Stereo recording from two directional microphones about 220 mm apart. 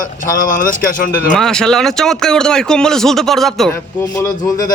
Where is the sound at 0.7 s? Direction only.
40° left (ahead or behind).